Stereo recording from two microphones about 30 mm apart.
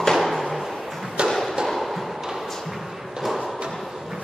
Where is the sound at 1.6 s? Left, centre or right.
Centre.